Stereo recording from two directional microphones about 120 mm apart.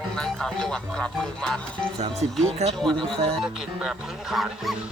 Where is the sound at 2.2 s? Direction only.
75° right (ahead or behind).